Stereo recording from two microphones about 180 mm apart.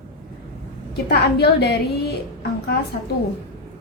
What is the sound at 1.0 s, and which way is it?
A woman's voice, 65° left (ahead or behind).